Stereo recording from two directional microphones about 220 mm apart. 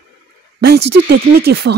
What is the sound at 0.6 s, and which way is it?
Speech, 45° right (ahead or behind).